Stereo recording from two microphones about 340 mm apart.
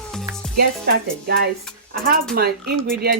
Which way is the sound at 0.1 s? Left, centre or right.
Centre.